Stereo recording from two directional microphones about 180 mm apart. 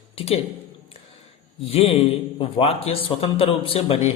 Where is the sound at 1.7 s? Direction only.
35° left (ahead or behind).